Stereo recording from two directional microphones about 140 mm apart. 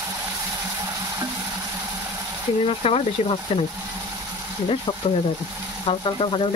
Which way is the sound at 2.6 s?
45° left (ahead or behind).